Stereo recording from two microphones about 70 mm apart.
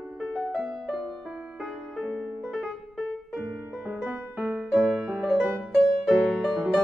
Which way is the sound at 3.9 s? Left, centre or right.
Right.